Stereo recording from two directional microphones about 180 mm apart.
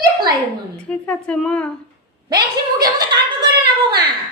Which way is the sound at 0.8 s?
5° left (ahead or behind).